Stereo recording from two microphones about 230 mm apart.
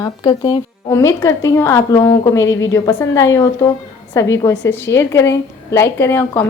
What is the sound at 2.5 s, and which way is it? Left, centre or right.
Speech, left.